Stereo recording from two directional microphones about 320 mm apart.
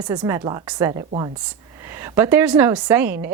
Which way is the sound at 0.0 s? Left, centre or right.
Centre.